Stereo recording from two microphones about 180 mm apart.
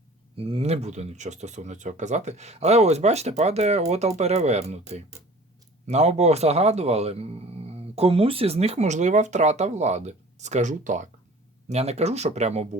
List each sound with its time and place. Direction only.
0.3 s speech: 30° right (ahead or behind)
5.9 s speech: 40° right (ahead or behind)